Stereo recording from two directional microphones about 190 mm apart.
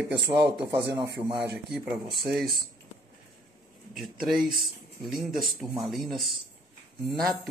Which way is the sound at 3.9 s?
Centre (ahead or behind).